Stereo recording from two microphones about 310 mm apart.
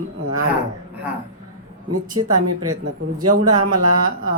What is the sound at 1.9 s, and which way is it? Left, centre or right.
Speech, right.